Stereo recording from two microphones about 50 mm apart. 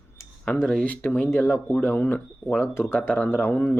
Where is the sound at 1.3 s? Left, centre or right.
Left.